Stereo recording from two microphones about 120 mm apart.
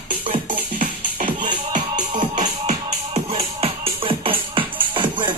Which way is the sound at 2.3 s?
70° right (ahead or behind).